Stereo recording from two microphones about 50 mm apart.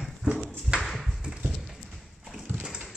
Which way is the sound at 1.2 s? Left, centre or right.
Centre.